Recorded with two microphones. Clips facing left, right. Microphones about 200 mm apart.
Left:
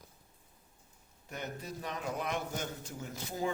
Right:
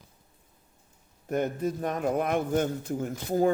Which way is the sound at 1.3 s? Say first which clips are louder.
Right 14 dB; 50° right (ahead or behind).